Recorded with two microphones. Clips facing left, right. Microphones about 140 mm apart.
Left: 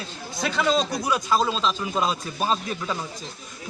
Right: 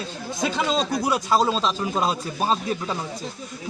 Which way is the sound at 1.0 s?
30° right (ahead or behind).